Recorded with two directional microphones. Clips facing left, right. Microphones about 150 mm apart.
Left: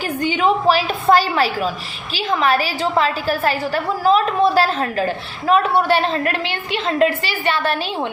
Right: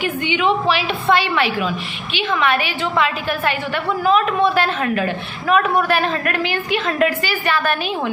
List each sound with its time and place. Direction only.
0.0 s a woman's voice: 40° left (ahead or behind)